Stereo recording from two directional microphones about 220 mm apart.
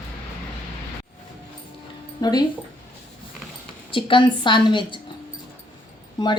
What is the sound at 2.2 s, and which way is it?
Speech, 20° left (ahead or behind).